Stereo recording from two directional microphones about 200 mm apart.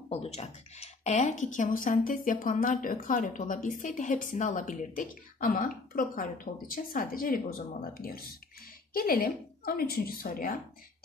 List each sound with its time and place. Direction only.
0.1 s a woman's voice: 30° left (ahead or behind)